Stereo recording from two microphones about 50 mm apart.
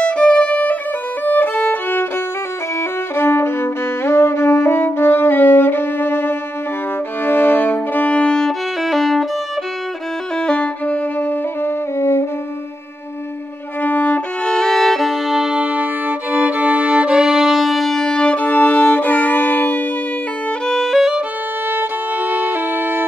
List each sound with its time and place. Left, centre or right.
0.0 s music: left
1.2 s violin: left
3.2 s music: left
8.8 s music: centre
10.4 s violin: left
11.1 s music: left
12.0 s saxophone: left
13.8 s violin: left
14.4 s violin: centre
15.5 s violin: right; by 19.8 s left
20.6 s violin: centre
21.6 s violin: right